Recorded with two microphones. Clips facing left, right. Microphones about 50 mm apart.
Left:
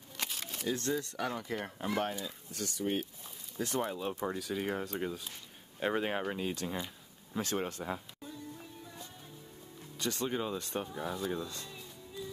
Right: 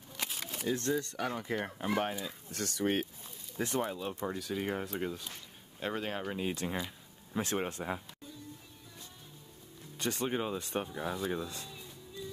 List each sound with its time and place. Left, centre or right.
0.2 s a sound: centre
0.9 s speech: centre
1.5 s speech: centre
2.5 s speech: right
3.6 s speech: centre
5.8 s speech: centre
6.5 s speech: right
9.9 s speech: right